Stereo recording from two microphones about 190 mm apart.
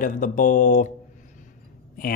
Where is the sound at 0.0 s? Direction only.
40° left (ahead or behind).